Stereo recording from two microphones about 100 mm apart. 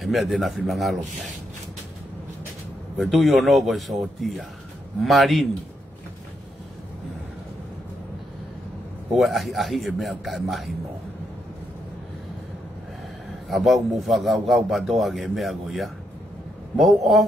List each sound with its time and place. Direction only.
0.0 s a man's voice: centre (ahead or behind)
3.0 s a man's voice: centre (ahead or behind)
9.1 s a man's voice: centre (ahead or behind)
13.5 s a man's voice: centre (ahead or behind)